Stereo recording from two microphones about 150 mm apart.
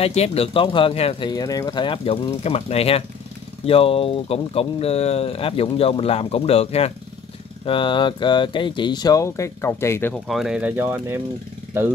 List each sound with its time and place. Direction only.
0.0 s speech: 45° left (ahead or behind)
1.3 s speech: 25° left (ahead or behind)
10.2 s speech: centre (ahead or behind)